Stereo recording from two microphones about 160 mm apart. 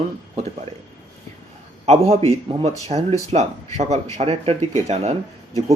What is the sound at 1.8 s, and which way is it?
Speech, 40° right (ahead or behind).